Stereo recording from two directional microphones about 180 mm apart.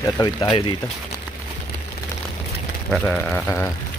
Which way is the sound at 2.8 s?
5° left (ahead or behind).